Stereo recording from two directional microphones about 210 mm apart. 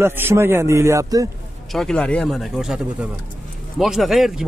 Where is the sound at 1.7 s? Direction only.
Centre (ahead or behind).